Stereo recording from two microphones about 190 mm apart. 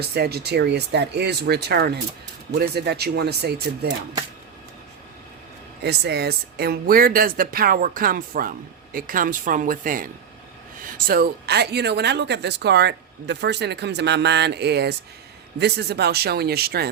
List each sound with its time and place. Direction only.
0.1 s speech: 60° right (ahead or behind)
5.8 s speech: 60° right (ahead or behind)